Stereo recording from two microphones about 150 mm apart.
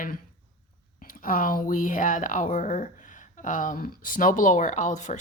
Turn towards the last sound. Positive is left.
turn(degrees=55)  # may be behind; listen again after turning